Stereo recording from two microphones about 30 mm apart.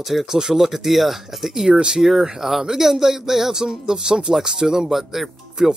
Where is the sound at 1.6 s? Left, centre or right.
Right.